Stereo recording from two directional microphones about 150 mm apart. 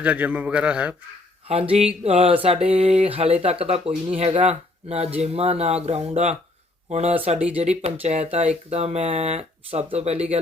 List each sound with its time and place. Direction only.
0.0 s a man's voice: 10° right (ahead or behind)
1.5 s speech: 45° right (ahead or behind)